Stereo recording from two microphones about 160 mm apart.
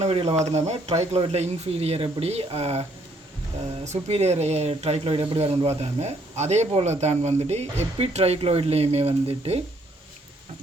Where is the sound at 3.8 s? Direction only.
45° right (ahead or behind).